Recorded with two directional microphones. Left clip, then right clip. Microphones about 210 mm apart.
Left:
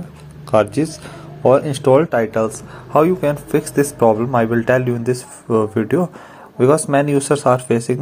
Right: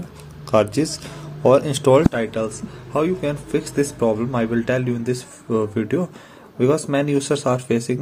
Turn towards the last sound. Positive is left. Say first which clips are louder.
# left 5 dB
turn(degrees=-5)  # may be behind; listen again after turning